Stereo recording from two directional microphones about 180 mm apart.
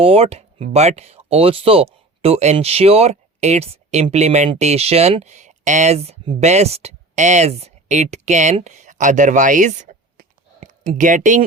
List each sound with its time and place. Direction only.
0.0 s speech: 35° right (ahead or behind)